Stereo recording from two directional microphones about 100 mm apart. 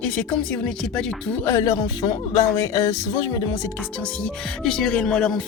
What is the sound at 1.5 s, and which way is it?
Speech, 30° left (ahead or behind).